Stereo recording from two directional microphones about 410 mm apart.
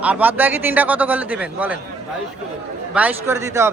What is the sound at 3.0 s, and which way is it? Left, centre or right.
Speech, centre.